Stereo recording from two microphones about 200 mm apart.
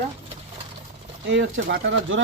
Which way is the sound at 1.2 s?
60° right (ahead or behind).